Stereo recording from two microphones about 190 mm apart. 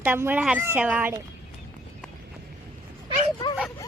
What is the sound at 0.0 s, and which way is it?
Speech, 10° right (ahead or behind).